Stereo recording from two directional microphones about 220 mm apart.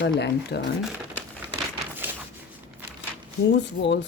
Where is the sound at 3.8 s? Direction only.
55° left (ahead or behind).